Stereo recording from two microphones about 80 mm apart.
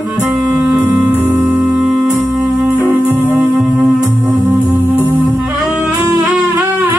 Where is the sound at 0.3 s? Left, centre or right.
Centre.